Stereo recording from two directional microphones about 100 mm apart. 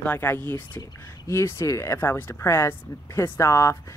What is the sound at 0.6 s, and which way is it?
Speech, 45° left (ahead or behind).